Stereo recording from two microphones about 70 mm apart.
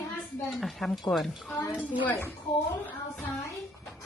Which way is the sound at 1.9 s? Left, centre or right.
Left.